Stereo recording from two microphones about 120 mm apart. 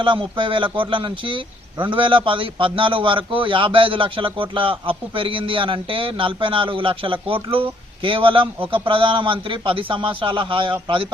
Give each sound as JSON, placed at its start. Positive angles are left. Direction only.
{"t": 0.0, "sound": "a man's voice", "side_deg": -45}